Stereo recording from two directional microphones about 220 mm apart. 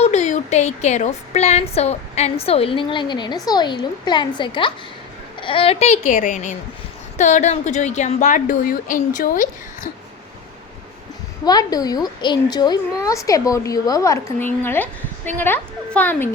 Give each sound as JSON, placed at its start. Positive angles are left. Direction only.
{"t": 0.0, "sound": "a woman's voice", "side_deg": 30}
{"t": 6.1, "sound": "a woman's voice", "side_deg": 35}
{"t": 11.4, "sound": "a woman's voice", "side_deg": 15}